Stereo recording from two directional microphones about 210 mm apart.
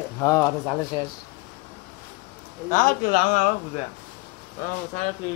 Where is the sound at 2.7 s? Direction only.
40° left (ahead or behind).